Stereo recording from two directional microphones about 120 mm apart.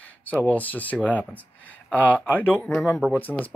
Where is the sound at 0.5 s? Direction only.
15° left (ahead or behind).